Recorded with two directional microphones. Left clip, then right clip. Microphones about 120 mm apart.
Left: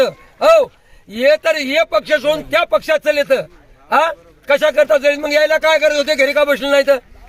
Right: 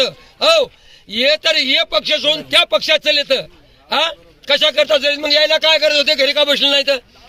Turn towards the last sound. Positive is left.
turn(degrees=-20)  # may be behind; listen again after turning